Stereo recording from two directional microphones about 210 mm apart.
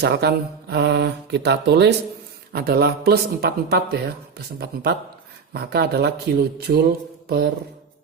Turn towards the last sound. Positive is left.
turn(degrees=-50)  # may be behind; listen again after turning